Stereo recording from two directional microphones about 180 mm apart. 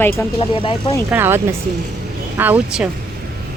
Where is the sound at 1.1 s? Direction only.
10° right (ahead or behind).